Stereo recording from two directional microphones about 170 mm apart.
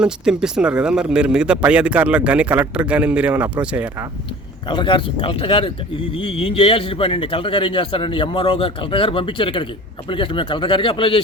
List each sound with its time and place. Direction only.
0.0 s speech: 5° right (ahead or behind)
4.7 s speech: 30° left (ahead or behind)